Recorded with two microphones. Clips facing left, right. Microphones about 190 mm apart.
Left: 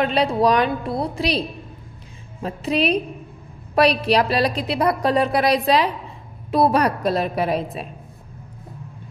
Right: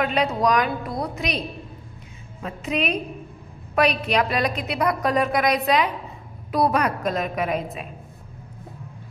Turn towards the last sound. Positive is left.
turn(degrees=35)  # may be behind; listen again after turning